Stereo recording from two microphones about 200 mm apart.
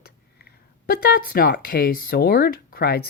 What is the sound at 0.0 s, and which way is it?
Speech, 50° left (ahead or behind).